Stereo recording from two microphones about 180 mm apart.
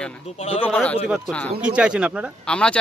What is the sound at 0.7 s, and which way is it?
Speech, 5° left (ahead or behind).